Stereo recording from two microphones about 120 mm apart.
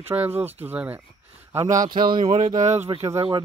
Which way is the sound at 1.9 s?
40° right (ahead or behind).